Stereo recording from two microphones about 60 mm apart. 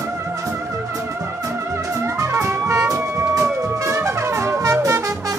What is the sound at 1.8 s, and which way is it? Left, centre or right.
Music, right.